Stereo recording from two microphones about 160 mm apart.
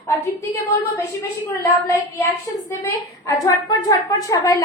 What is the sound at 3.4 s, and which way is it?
A woman's voice, 25° left (ahead or behind).